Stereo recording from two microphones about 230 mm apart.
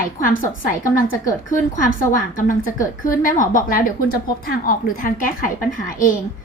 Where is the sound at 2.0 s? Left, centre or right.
Left.